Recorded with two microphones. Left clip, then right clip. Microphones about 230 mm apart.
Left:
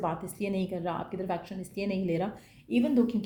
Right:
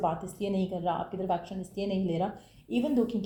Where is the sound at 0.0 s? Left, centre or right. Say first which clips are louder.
Right 2 dB; left.